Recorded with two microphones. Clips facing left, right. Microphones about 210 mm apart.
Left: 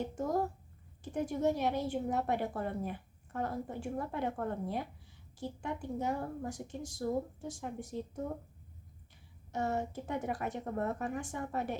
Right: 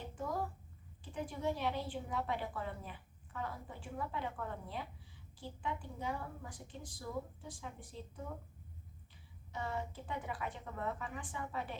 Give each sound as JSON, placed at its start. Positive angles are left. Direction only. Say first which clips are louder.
{"t": 0.2, "sound": "a child's voice", "louder": "left 5 dB", "side_deg": 45}
{"t": 9.5, "sound": "a woman's voice", "louder": "left 7 dB", "side_deg": 45}